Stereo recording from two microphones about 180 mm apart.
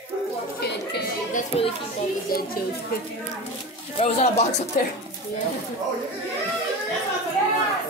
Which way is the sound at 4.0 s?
40° left (ahead or behind).